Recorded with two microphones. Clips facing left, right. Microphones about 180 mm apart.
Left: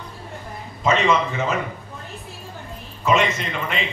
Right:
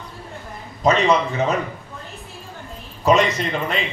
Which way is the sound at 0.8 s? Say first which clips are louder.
Right 3 dB; 35° right (ahead or behind).